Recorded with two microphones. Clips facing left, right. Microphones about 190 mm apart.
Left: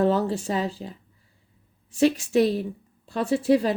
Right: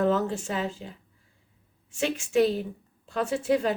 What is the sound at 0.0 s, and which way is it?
Speech, 35° left (ahead or behind).